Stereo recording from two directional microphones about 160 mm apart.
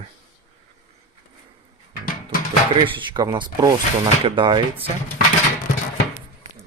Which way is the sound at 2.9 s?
25° right (ahead or behind).